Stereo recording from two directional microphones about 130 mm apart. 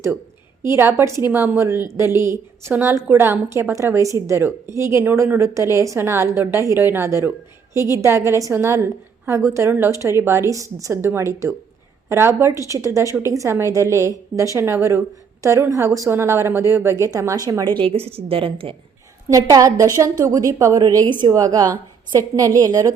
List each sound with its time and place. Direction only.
0.6 s a woman's voice: 20° right (ahead or behind)
17.8 s a woman's voice: 50° right (ahead or behind)
19.3 s a woman's voice: 25° right (ahead or behind)